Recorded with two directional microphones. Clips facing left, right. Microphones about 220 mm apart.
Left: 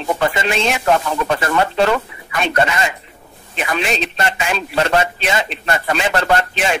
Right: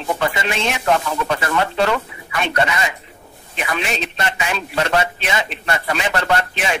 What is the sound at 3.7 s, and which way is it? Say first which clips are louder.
Speech: left 3 dB; 30° left (ahead or behind).